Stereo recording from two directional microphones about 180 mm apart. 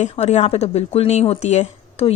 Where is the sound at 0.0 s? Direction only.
40° left (ahead or behind).